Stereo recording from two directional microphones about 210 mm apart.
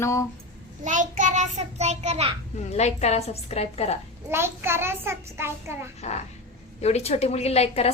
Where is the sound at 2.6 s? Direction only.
30° left (ahead or behind).